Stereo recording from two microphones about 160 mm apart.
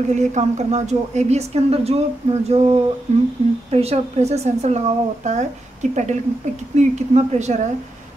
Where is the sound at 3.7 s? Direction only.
40° right (ahead or behind).